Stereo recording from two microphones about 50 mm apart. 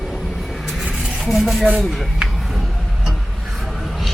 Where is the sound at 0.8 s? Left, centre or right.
Centre.